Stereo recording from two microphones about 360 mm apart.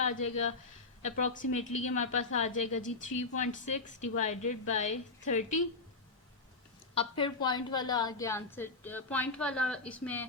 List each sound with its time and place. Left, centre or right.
1.1 s a woman's voice: left
6.9 s a woman's voice: centre